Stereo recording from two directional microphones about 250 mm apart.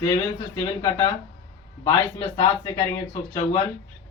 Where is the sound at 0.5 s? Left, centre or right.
Centre.